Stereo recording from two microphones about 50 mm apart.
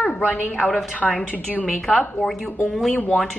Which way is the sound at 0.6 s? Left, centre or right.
Centre.